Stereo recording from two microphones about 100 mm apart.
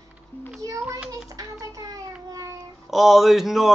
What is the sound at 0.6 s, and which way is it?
Music, 35° right (ahead or behind).